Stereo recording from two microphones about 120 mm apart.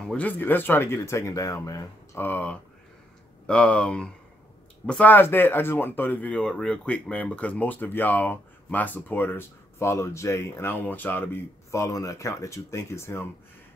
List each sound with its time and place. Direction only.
0.1 s speech: 10° left (ahead or behind)
2.1 s speech: 15° left (ahead or behind)
11.7 s speech: 25° left (ahead or behind)